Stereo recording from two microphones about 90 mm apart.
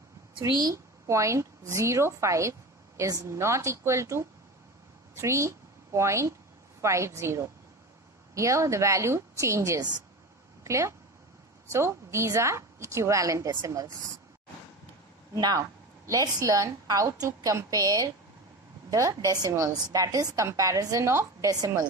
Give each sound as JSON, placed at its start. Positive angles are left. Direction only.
{"t": 0.5, "sound": "a woman's voice", "side_deg": -50}
{"t": 1.0, "sound": "a woman's voice", "side_deg": -35}
{"t": 16.1, "sound": "a woman's voice", "side_deg": -40}